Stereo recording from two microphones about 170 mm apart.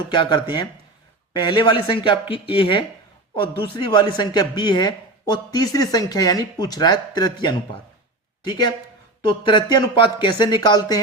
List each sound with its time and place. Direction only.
0.1 s speech: 30° left (ahead or behind)